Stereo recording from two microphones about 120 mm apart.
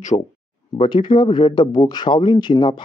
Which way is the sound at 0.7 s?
45° left (ahead or behind).